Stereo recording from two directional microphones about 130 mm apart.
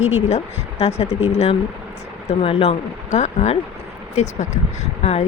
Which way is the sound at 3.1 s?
55° left (ahead or behind).